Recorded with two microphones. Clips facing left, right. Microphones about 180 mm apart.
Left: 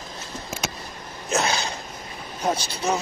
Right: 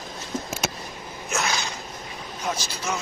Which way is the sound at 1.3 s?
30° left (ahead or behind).